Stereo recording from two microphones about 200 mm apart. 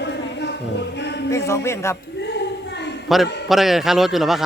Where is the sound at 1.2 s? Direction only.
15° left (ahead or behind).